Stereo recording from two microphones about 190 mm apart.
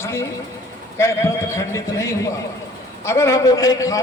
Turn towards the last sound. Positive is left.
turn(degrees=15)  # may be behind; listen again after turning